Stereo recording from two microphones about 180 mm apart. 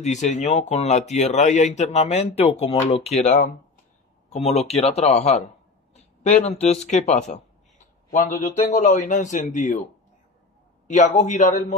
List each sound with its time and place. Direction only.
0.0 s speech: 40° left (ahead or behind)
4.5 s speech: 35° left (ahead or behind)
10.9 s speech: 40° left (ahead or behind)